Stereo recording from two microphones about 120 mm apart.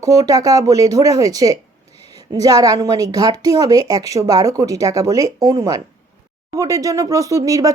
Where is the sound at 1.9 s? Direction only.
60° left (ahead or behind).